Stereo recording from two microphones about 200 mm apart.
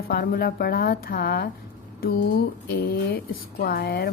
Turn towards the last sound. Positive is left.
turn(degrees=50)  # may be behind; listen again after turning